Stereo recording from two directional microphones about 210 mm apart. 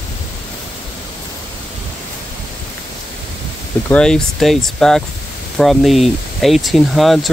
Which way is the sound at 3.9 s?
5° left (ahead or behind).